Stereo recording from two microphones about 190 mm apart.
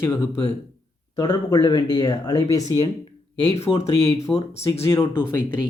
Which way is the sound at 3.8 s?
35° left (ahead or behind).